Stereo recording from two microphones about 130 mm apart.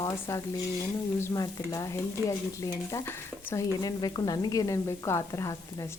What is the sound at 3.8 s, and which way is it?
A woman's voice, 30° left (ahead or behind).